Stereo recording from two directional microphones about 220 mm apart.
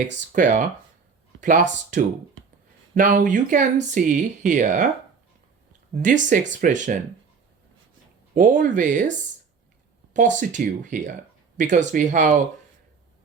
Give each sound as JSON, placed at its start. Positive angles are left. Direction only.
{"t": 0.3, "sound": "speech", "side_deg": -35}
{"t": 5.9, "sound": "speech", "side_deg": -35}
{"t": 8.4, "sound": "speech", "side_deg": -35}
{"t": 10.2, "sound": "speech", "side_deg": -35}